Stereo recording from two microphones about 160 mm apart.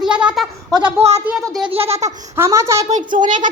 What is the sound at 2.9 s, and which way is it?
Speech, 50° right (ahead or behind).